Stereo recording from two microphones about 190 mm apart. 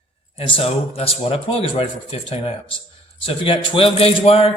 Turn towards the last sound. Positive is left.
turn(degrees=30)  # may be behind; listen again after turning